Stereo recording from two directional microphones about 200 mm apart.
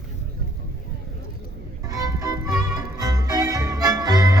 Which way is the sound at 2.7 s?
20° right (ahead or behind).